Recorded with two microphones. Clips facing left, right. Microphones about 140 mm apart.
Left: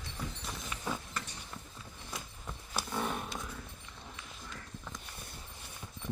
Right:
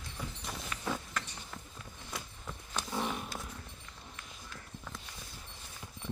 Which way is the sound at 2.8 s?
10° left (ahead or behind).